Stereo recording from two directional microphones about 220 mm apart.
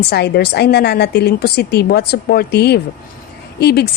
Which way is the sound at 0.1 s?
50° left (ahead or behind).